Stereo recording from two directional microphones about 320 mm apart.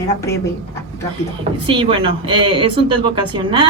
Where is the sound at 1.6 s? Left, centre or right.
Centre.